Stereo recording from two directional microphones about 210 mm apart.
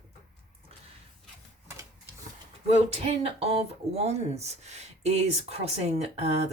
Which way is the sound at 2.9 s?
30° right (ahead or behind).